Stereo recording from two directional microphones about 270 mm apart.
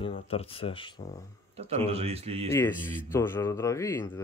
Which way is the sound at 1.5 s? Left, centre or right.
Right.